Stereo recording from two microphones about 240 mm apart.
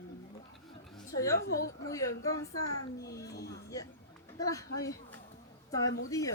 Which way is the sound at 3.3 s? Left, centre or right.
Left.